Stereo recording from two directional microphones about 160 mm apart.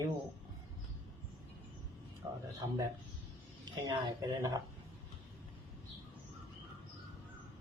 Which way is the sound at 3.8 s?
25° right (ahead or behind).